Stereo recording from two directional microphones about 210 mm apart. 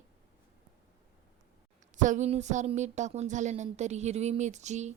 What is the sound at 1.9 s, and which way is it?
A woman's voice, 35° right (ahead or behind).